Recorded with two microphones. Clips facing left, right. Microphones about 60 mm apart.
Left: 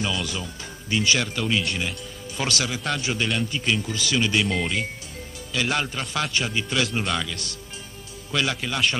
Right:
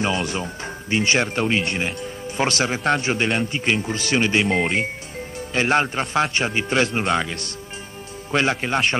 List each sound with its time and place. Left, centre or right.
0.0 s a man's voice: right